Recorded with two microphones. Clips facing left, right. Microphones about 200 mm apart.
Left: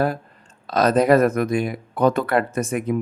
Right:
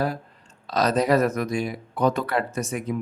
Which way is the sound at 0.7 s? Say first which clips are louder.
Left 5 dB; 50° left (ahead or behind).